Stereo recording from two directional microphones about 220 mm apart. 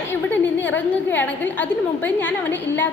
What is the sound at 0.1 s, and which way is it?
A woman's voice, 10° left (ahead or behind).